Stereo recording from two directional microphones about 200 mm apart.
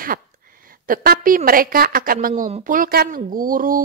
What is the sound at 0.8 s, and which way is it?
Speech, 45° right (ahead or behind).